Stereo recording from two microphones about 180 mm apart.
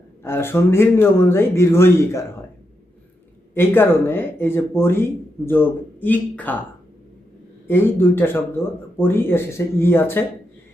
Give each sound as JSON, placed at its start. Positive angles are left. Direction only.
{"t": 0.2, "sound": "speech", "side_deg": 15}
{"t": 3.5, "sound": "speech", "side_deg": 10}
{"t": 7.7, "sound": "speech", "side_deg": 10}